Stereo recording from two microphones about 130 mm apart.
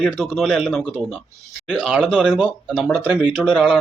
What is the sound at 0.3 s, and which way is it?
Speech, 5° right (ahead or behind).